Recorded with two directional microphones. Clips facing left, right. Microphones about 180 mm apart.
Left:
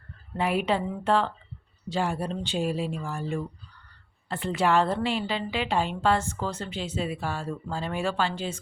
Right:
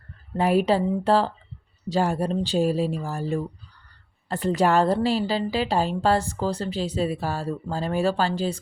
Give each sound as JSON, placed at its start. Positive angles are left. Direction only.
{"t": 0.3, "sound": "a woman's voice", "side_deg": -40}